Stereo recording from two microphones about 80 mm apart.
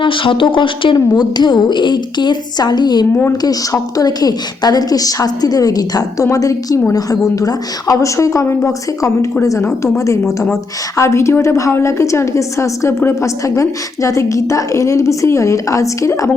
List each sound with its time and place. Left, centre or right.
0.0 s speech: left
0.9 s speech: left
3.4 s a woman's voice: left
13.4 s a woman's voice: left